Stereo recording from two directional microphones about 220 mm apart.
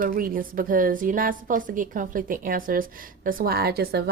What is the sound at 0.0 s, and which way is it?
A woman's voice, 40° right (ahead or behind).